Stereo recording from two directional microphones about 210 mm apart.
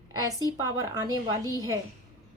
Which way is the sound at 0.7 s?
20° right (ahead or behind).